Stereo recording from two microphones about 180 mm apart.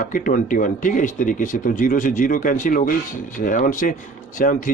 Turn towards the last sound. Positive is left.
turn(degrees=45)  # may be behind; listen again after turning